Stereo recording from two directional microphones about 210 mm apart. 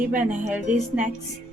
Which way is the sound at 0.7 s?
35° right (ahead or behind).